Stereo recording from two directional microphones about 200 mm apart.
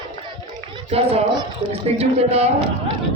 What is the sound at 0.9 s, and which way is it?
Children playing, 30° right (ahead or behind).